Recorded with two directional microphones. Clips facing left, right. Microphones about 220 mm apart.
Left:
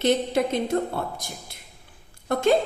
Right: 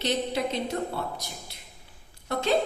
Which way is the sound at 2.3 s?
50° left (ahead or behind).